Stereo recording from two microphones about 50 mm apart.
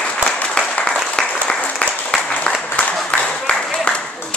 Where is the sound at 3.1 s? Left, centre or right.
Left.